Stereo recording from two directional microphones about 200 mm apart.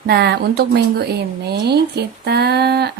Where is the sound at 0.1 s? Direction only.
55° right (ahead or behind).